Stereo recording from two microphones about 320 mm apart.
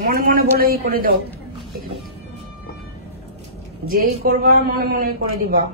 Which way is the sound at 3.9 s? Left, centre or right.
Right.